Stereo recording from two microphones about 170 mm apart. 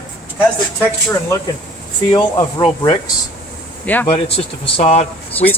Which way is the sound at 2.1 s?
25° left (ahead or behind).